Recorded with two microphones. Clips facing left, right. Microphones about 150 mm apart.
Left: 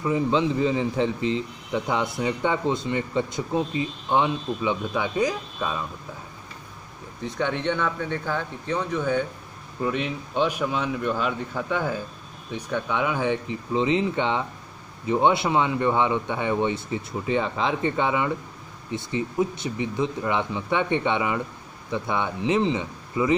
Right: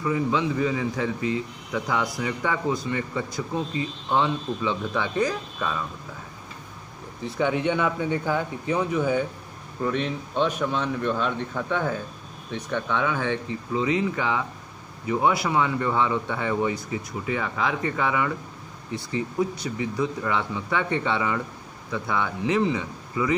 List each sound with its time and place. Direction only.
0.0 s speech: 25° left (ahead or behind)
7.2 s speech: 5° right (ahead or behind)
9.8 s a man's voice: 5° left (ahead or behind); by 23.3 s 25° left (ahead or behind)